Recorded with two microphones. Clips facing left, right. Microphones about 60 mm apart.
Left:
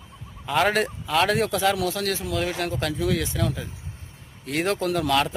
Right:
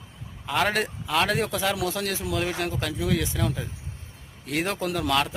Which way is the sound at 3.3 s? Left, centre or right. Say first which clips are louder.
Left 1 dB; centre.